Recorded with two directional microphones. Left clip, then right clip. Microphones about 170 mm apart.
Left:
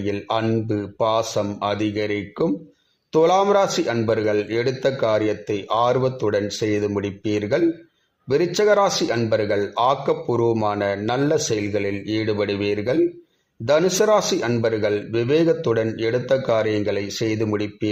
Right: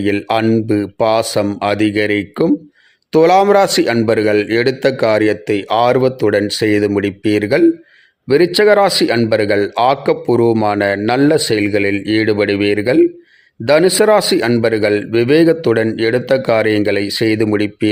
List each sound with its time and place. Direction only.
0.0 s a man's voice: 45° right (ahead or behind)